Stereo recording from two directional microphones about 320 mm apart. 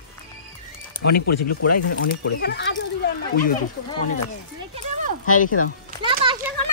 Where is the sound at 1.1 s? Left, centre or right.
Left.